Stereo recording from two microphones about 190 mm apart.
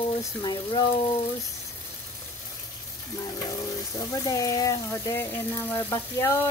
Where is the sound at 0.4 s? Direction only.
20° left (ahead or behind).